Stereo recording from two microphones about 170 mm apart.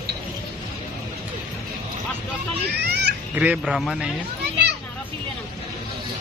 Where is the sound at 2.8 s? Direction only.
75° right (ahead or behind).